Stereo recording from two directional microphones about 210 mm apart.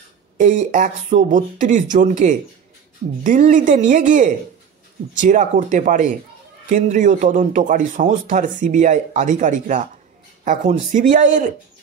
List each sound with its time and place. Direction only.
0.4 s speech: 40° right (ahead or behind)